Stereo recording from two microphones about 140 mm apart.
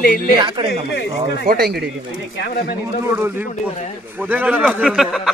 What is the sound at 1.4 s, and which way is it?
Speech, 90° right.